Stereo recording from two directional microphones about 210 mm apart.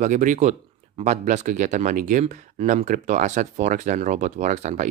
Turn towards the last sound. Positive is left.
turn(degrees=-35)  # may be behind; listen again after turning